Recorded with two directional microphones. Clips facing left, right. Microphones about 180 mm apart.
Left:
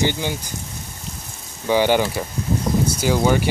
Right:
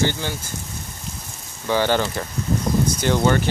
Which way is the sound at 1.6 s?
15° left (ahead or behind).